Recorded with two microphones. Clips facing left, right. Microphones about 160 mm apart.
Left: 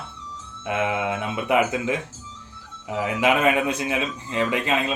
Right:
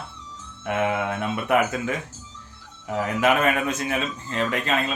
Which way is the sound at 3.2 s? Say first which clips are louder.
Left 1 dB; 15° left (ahead or behind).